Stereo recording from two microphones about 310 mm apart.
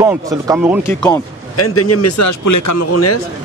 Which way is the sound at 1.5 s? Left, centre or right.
Left.